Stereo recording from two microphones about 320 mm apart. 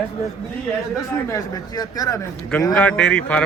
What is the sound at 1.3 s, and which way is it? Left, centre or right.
Speech, centre.